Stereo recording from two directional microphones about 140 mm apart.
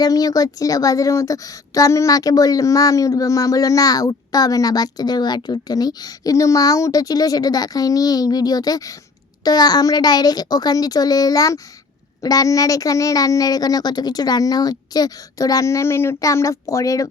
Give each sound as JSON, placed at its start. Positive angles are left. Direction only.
{"t": 0.0, "sound": "a woman's voice", "side_deg": 25}